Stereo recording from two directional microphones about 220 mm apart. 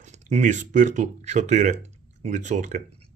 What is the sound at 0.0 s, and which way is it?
Speech, 30° right (ahead or behind).